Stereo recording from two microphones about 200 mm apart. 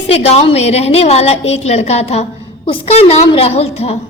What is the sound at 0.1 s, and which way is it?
A woman's voice, 30° left (ahead or behind).